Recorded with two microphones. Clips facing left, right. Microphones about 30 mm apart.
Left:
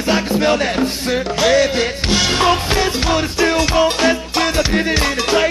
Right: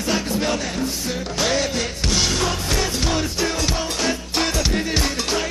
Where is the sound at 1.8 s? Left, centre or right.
Left.